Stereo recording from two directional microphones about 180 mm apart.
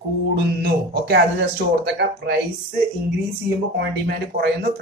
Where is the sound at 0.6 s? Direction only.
60° right (ahead or behind).